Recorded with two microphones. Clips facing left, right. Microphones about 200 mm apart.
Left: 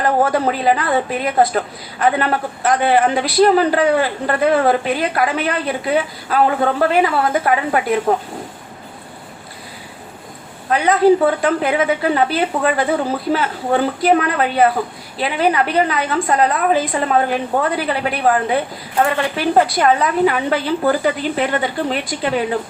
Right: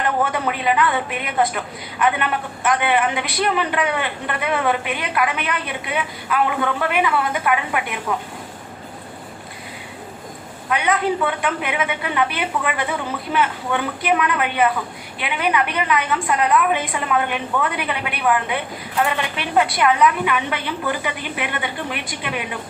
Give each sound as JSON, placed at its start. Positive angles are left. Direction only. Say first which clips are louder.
{"t": 0.0, "sound": "a woman's voice", "louder": "left 5 dB", "side_deg": 35}
{"t": 10.7, "sound": "a woman's voice", "louder": "left 8 dB", "side_deg": 35}